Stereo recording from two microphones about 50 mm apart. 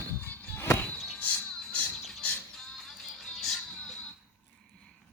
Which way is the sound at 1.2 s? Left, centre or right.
Left.